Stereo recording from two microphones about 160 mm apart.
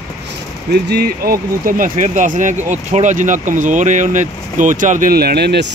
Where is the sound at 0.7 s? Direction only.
85° right.